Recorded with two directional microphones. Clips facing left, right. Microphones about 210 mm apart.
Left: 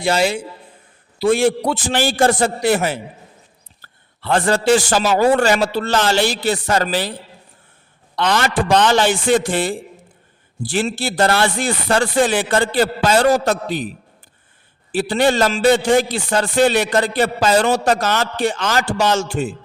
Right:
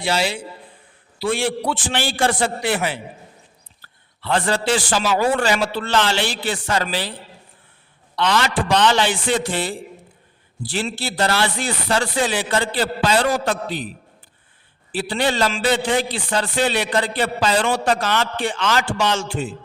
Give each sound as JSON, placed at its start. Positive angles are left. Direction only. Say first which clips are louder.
{"t": 0.0, "sound": "a man's voice", "louder": "left 5 dB", "side_deg": 45}
{"t": 8.1, "sound": "a man's voice", "louder": "left 2 dB", "side_deg": 45}
{"t": 14.9, "sound": "a man's voice", "louder": "left 5 dB", "side_deg": 45}